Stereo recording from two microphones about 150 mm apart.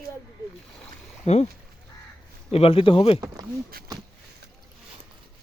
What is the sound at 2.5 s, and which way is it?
Speech, 40° left (ahead or behind).